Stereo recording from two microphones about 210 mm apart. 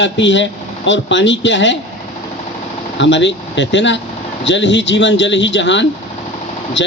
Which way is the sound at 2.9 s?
60° left (ahead or behind).